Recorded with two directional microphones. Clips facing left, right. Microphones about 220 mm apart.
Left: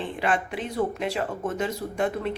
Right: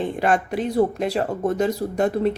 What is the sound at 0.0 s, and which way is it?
Speech, 45° right (ahead or behind).